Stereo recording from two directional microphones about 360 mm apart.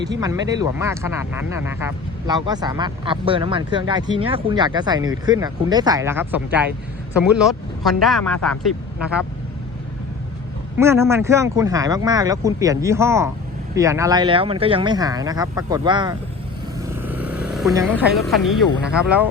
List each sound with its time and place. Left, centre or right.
0.2 s speech: centre
10.8 s speech: centre
16.8 s vehicle: centre
18.8 s speech: centre